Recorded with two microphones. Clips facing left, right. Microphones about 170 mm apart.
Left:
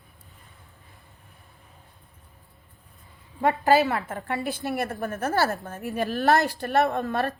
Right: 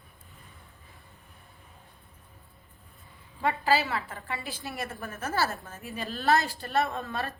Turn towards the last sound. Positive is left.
turn(degrees=65)  # may be behind; listen again after turning